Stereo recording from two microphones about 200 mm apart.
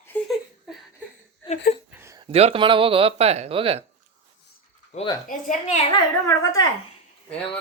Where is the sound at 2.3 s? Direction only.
30° right (ahead or behind).